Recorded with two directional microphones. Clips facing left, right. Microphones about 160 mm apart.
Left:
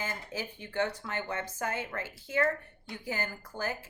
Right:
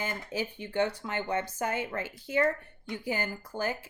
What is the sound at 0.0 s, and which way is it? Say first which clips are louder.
Speech: right 4 dB; 20° right (ahead or behind).